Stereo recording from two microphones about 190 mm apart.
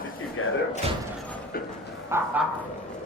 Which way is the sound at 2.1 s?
15° right (ahead or behind).